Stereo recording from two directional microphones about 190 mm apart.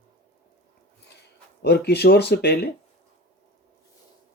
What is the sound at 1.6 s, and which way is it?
Speech, 60° left (ahead or behind).